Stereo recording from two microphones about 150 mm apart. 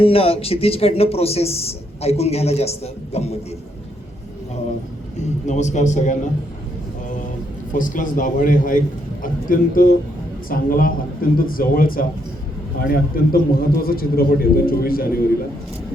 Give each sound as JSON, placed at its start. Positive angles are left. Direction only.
{"t": 0.0, "sound": "speech", "side_deg": 40}
{"t": 5.5, "sound": "speech", "side_deg": 50}
{"t": 7.7, "sound": "a man's voice", "side_deg": 60}